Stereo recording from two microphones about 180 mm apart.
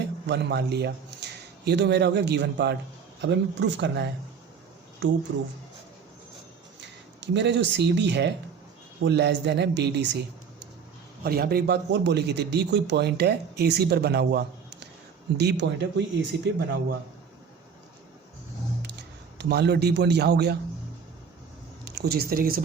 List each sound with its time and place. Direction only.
0.0 s a man's voice: 70° right (ahead or behind)
3.2 s speech: 80° right
6.8 s speech: 75° right (ahead or behind)
11.2 s a man's voice: 60° right (ahead or behind); by 16.6 s 75° right (ahead or behind)
18.8 s a man's voice: 65° right (ahead or behind)
21.8 s speech: 60° right (ahead or behind)